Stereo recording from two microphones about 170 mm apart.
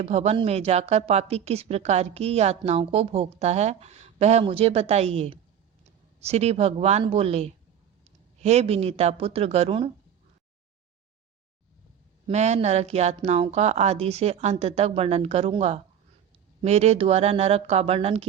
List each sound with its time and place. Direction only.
0.0 s a woman's voice: 40° right (ahead or behind)
12.3 s a woman's voice: 40° right (ahead or behind)